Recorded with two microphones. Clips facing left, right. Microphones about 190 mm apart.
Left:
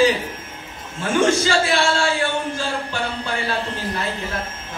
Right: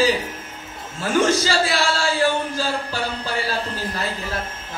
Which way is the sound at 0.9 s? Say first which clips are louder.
Left 1 dB; 35° right (ahead or behind).